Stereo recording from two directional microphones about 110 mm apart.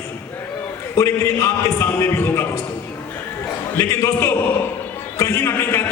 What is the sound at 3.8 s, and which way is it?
A man's voice, 25° left (ahead or behind).